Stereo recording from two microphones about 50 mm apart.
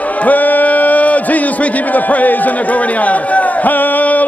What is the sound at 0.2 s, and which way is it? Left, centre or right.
A man's voice, left.